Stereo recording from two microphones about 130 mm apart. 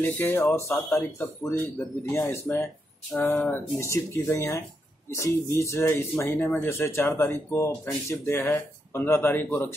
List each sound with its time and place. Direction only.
0.0 s speech: 15° left (ahead or behind)